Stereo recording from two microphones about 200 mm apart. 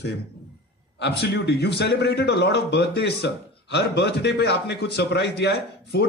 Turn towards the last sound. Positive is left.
turn(degrees=55)  # may be behind; listen again after turning